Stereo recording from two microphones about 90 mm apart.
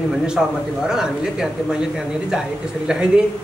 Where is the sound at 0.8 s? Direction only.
5° right (ahead or behind).